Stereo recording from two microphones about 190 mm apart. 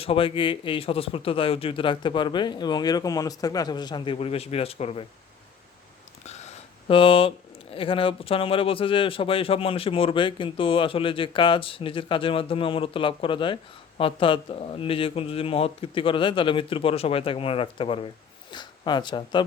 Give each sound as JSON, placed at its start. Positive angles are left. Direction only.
{"t": 0.0, "sound": "speech", "side_deg": 30}
{"t": 6.2, "sound": "speech", "side_deg": 30}